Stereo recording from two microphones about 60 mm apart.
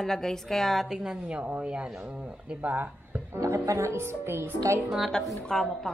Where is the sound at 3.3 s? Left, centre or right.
Right.